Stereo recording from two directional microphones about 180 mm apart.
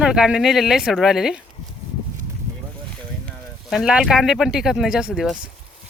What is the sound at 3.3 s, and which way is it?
Speech, centre (ahead or behind).